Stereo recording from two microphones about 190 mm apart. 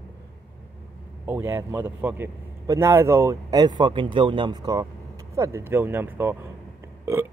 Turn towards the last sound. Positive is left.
turn(degrees=-10)  # may be behind; listen again after turning